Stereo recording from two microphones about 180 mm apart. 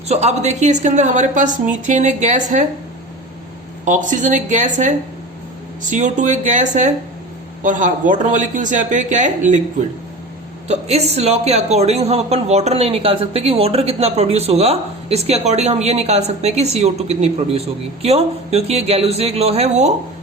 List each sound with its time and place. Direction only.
0.1 s speech: 35° right (ahead or behind)
3.8 s speech: 45° right (ahead or behind)
10.7 s speech: 35° right (ahead or behind)